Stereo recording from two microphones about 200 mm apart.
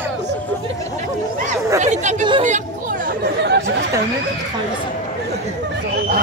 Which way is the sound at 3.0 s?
55° right (ahead or behind).